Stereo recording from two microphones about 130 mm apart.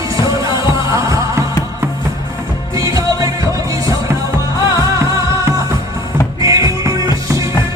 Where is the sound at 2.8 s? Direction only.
25° right (ahead or behind).